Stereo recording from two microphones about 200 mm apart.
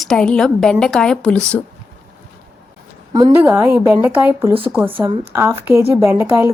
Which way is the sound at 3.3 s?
10° right (ahead or behind).